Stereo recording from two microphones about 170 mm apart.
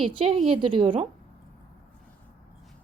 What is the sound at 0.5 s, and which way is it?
Speech, 30° right (ahead or behind).